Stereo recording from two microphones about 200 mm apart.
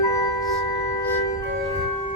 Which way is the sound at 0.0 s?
15° left (ahead or behind).